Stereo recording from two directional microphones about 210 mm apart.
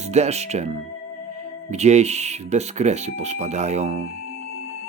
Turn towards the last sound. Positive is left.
turn(degrees=-30)  # may be behind; listen again after turning